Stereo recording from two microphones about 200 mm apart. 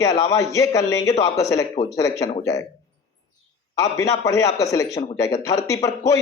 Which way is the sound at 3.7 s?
15° left (ahead or behind).